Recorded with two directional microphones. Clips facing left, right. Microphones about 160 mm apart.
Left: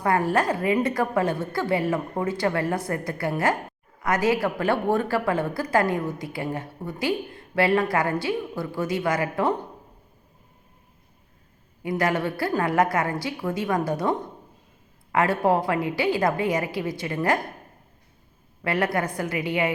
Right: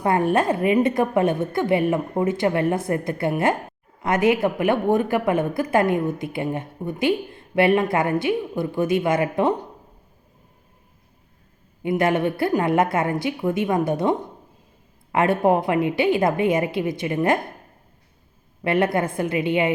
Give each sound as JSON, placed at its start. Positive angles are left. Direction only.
{"t": 0.0, "sound": "a woman's voice", "side_deg": -20}
{"t": 11.8, "sound": "a woman's voice", "side_deg": -25}
{"t": 18.6, "sound": "a woman's voice", "side_deg": -25}